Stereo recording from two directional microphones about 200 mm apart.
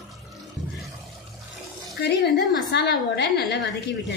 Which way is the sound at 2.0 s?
55° left (ahead or behind).